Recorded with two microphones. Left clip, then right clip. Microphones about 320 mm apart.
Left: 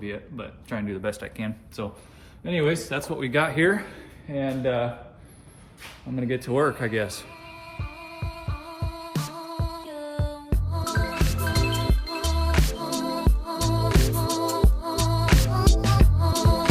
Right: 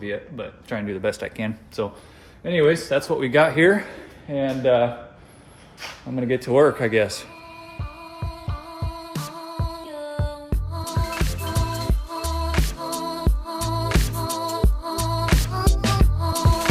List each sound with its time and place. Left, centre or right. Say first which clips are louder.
0.0 s speech: right 5 dB; centre
6.1 s speech: right 7 dB; centre
7.7 s music: right 1 dB; centre